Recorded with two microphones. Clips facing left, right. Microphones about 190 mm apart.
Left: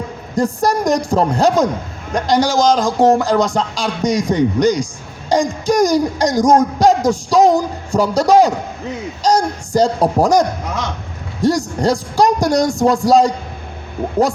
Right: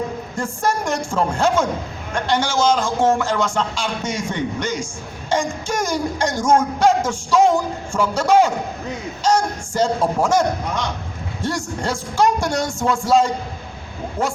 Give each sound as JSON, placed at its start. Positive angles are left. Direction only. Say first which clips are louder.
{"t": 0.3, "sound": "speech", "louder": "left 7 dB", "side_deg": 35}
{"t": 11.4, "sound": "speech", "louder": "left 9 dB", "side_deg": 40}